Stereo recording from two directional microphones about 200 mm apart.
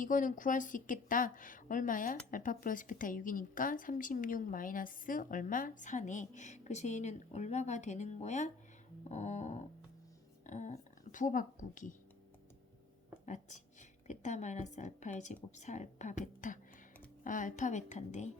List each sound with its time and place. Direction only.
0.0 s a woman's voice: 40° left (ahead or behind)
13.2 s a woman's voice: 40° left (ahead or behind)